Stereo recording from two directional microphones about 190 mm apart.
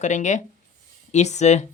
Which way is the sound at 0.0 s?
40° left (ahead or behind).